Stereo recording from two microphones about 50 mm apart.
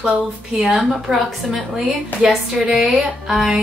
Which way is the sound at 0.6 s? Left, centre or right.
Centre.